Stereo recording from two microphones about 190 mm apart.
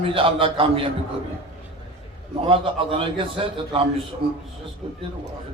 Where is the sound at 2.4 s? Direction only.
30° right (ahead or behind).